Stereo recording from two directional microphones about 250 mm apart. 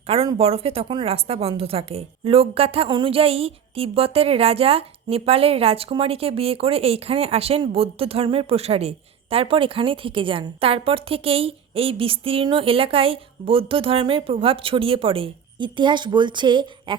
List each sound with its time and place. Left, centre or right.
0.1 s speech: right